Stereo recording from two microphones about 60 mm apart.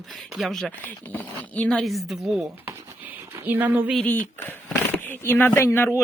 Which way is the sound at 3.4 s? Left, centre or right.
Right.